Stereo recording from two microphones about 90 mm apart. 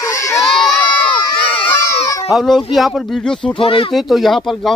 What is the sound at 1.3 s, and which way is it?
Crowd, 75° left (ahead or behind).